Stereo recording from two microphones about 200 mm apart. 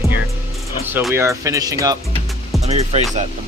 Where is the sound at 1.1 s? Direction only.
15° right (ahead or behind).